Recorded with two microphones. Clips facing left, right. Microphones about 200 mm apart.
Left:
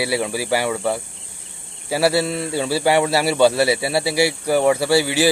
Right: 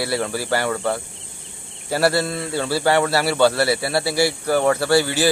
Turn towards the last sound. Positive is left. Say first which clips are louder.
# left 1 dB
turn(degrees=10)  # may be behind; listen again after turning